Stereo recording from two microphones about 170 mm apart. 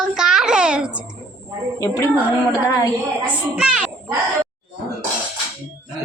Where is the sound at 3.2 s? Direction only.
5° right (ahead or behind).